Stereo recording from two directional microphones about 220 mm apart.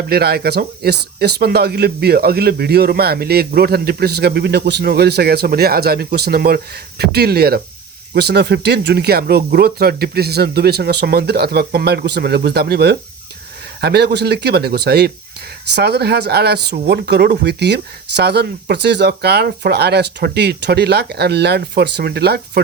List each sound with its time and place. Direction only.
0.1 s speech: 45° right (ahead or behind)